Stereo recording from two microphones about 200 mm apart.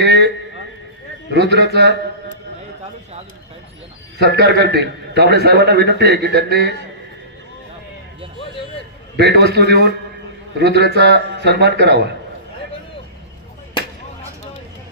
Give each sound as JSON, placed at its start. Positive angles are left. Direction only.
{"t": 0.0, "sound": "a sound", "side_deg": -60}
{"t": 1.3, "sound": "a man's voice", "side_deg": -60}
{"t": 4.2, "sound": "a man's voice", "side_deg": -55}
{"t": 9.1, "sound": "a man's voice", "side_deg": -55}